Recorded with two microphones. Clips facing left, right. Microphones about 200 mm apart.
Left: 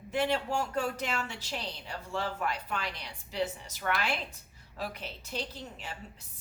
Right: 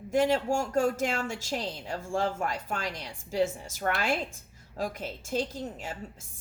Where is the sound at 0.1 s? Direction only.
45° right (ahead or behind).